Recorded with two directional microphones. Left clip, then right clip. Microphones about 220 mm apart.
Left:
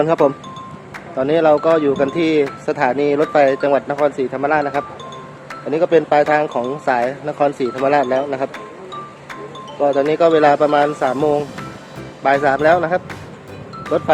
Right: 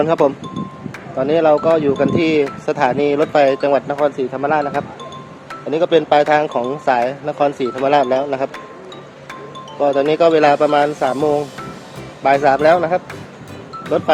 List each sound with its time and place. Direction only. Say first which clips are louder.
0.0 s speech: even; centre (ahead or behind)
9.8 s speech: right 1 dB; 10° right (ahead or behind)
12.2 s speech: right 2 dB; 10° right (ahead or behind)